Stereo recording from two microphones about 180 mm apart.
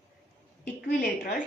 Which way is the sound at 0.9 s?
50° left (ahead or behind).